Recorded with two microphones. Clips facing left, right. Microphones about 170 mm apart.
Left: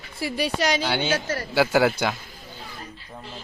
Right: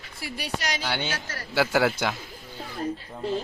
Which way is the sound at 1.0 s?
20° left (ahead or behind).